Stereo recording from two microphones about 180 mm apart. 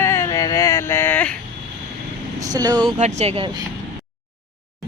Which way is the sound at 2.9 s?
40° right (ahead or behind).